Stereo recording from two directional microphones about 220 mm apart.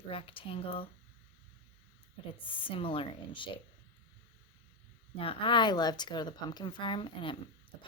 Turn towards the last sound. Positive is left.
turn(degrees=25)  # may be behind; listen again after turning